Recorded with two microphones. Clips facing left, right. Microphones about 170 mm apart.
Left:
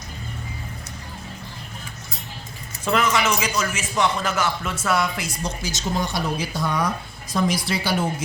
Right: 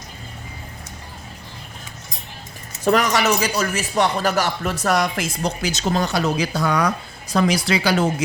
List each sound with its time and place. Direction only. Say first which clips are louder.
2.8 s speech: right 3 dB; 40° right (ahead or behind)
5.5 s speech: right 6 dB; 70° right (ahead or behind)
7.3 s speech: right 4 dB; 85° right